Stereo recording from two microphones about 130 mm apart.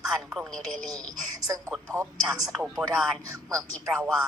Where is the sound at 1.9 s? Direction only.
20° right (ahead or behind).